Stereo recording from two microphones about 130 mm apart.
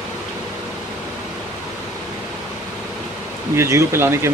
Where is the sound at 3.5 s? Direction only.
20° right (ahead or behind).